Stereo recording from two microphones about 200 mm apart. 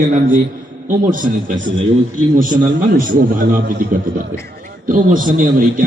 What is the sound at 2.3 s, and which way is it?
A man's voice, 45° right (ahead or behind).